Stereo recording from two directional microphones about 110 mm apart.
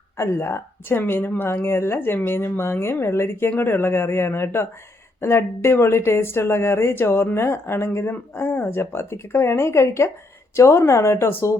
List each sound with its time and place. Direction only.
0.2 s speech: 25° left (ahead or behind)